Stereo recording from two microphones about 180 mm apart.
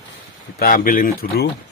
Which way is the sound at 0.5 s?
50° left (ahead or behind).